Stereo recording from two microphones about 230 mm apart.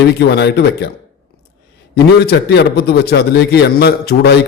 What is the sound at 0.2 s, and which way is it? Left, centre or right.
Speech, left.